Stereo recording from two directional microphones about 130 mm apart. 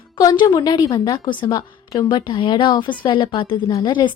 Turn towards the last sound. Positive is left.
turn(degrees=35)  # may be behind; listen again after turning